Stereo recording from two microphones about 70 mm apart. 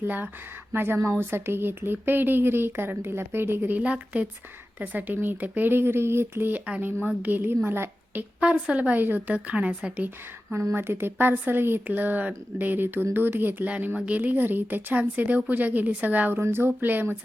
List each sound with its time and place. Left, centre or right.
0.0 s speech: right
8.4 s speech: centre
10.5 s speech: right
16.4 s speech: right